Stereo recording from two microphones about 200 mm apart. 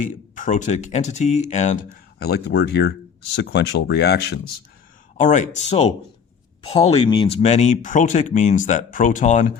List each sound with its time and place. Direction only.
0.3 s speech: 40° left (ahead or behind)
2.1 s speech: 50° left (ahead or behind)
5.1 s speech: 40° left (ahead or behind)